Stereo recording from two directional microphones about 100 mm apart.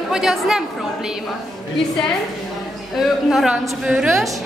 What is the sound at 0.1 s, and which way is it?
A woman's voice, 5° right (ahead or behind).